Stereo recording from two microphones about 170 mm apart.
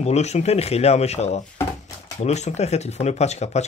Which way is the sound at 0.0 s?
40° left (ahead or behind).